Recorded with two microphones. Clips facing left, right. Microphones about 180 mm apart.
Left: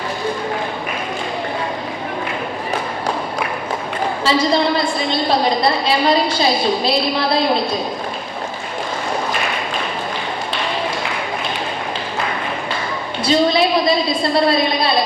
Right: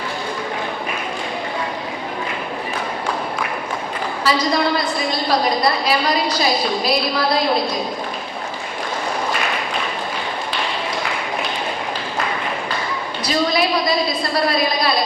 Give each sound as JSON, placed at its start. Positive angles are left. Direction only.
{"t": 4.2, "sound": "a woman's voice", "side_deg": 25}
{"t": 13.2, "sound": "a woman's voice", "side_deg": 25}